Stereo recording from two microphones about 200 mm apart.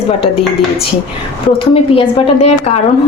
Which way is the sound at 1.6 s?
25° left (ahead or behind).